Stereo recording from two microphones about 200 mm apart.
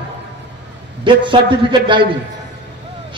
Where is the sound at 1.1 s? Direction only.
25° right (ahead or behind).